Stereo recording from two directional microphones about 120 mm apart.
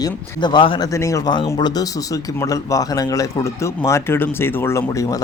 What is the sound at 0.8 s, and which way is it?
A man's voice, 25° left (ahead or behind).